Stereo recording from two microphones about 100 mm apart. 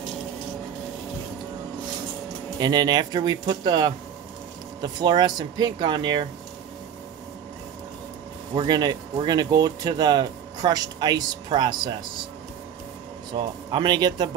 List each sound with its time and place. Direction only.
2.6 s speech: 45° right (ahead or behind)
8.5 s speech: 40° right (ahead or behind)
13.3 s speech: 55° right (ahead or behind)